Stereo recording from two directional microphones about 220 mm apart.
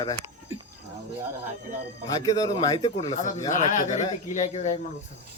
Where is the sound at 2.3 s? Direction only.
15° left (ahead or behind).